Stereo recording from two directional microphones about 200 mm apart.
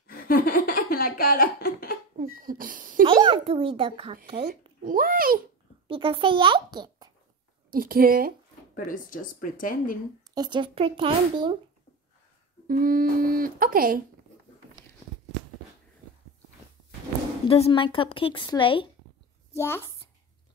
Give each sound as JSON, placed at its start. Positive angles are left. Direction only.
{"t": 0.0, "sound": "a sound", "side_deg": 45}
{"t": 2.1, "sound": "a sound", "side_deg": -45}
{"t": 3.1, "sound": "a child's voice", "side_deg": -25}
{"t": 4.5, "sound": "speech", "side_deg": -45}
{"t": 5.9, "sound": "a child's voice", "side_deg": -25}
{"t": 7.7, "sound": "speech", "side_deg": -45}
{"t": 8.7, "sound": "speech", "side_deg": 40}
{"t": 10.3, "sound": "speech", "side_deg": -20}
{"t": 12.6, "sound": "speech", "side_deg": -45}
{"t": 17.5, "sound": "a woman's voice", "side_deg": 30}
{"t": 19.5, "sound": "a child's voice", "side_deg": 15}